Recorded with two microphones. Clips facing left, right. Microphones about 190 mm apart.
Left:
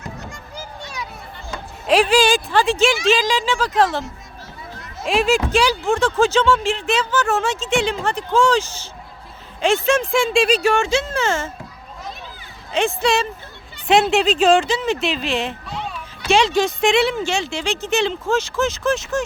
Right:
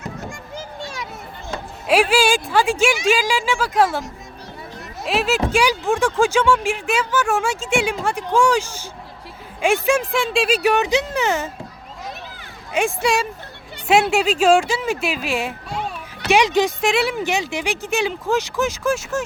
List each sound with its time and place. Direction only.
1.9 s speech: 10° right (ahead or behind)
10.6 s speech: 15° right (ahead or behind)
12.7 s speech: 10° right (ahead or behind)
16.8 s speech: 5° right (ahead or behind)